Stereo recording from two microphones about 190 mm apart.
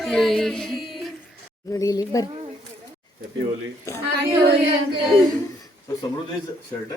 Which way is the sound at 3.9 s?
15° left (ahead or behind).